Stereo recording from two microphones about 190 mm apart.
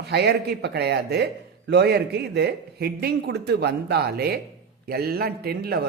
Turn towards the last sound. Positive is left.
turn(degrees=-55)  # may be behind; listen again after turning